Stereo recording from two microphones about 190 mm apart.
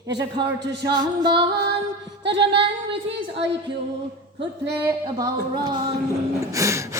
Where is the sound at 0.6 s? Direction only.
60° right (ahead or behind).